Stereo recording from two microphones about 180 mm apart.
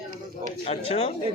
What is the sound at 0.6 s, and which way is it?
Speech, 35° left (ahead or behind).